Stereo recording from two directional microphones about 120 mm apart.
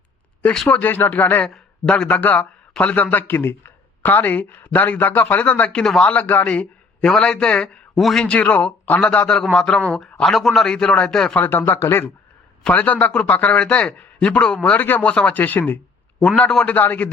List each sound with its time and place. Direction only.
0.4 s speech: centre (ahead or behind)
0.7 s speech: 15° left (ahead or behind)
1.5 s speech: 5° left (ahead or behind)